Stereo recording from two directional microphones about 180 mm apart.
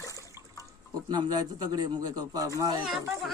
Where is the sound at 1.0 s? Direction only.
25° right (ahead or behind).